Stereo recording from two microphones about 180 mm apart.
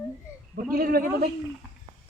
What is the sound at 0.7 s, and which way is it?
Speech, 55° right (ahead or behind).